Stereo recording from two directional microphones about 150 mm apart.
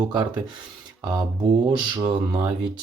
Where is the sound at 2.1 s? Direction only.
30° right (ahead or behind).